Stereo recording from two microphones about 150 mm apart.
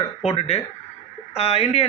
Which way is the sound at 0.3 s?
45° left (ahead or behind).